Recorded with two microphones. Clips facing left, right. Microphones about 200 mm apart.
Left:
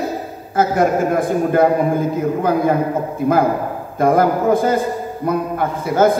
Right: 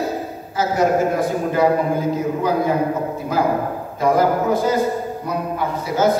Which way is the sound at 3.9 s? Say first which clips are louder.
Left 2 dB; 55° left (ahead or behind).